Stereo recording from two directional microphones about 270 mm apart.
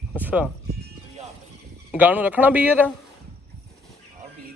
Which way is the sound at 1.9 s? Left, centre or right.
Centre.